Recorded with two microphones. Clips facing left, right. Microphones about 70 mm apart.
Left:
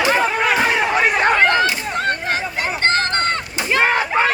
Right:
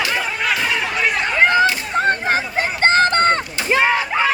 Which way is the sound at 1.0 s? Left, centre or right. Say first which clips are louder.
Left 5 dB; left.